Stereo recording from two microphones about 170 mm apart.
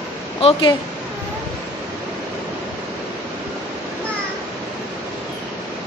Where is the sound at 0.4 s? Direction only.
30° left (ahead or behind).